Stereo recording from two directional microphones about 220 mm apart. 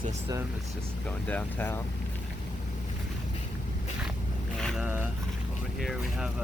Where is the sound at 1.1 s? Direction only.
5° left (ahead or behind).